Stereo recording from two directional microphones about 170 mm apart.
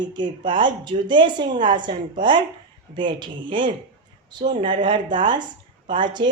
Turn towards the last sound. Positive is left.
turn(degrees=-25)  # may be behind; listen again after turning